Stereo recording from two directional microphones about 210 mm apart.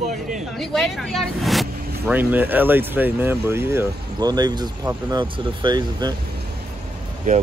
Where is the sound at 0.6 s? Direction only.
Centre (ahead or behind); by 6.1 s 20° right (ahead or behind).